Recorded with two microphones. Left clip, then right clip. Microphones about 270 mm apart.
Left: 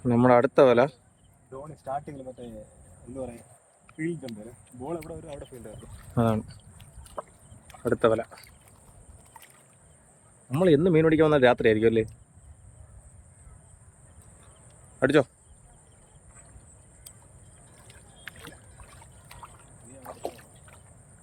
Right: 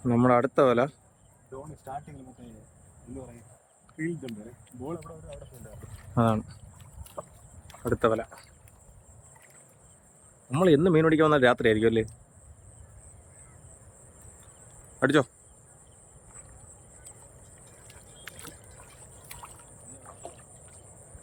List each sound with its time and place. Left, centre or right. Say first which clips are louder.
0.0 s speech: left 3 dB; centre
1.5 s speech: left 5 dB; centre
3.9 s speech: left 1 dB; left
6.1 s speech: even; centre
7.0 s rowboat: left 3 dB; centre
7.8 s speech: left 2 dB; centre
10.5 s speech: even; centre
14.9 s speech: left 2 dB; centre
17.8 s boat: left 2 dB; centre
20.0 s boat: left 9 dB; centre